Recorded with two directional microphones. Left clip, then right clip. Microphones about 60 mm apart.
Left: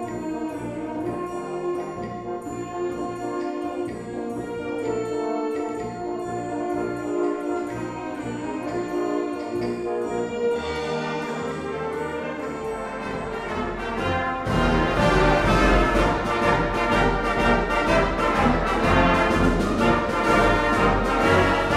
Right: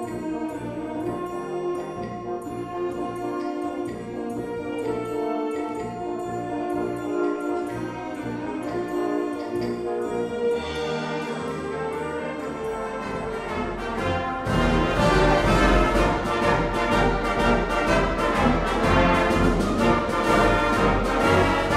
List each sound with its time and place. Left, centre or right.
6.7 s music: centre
8.9 s music: right
14.0 s music: right